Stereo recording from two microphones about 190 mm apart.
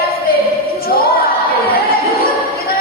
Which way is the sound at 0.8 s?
50° left (ahead or behind).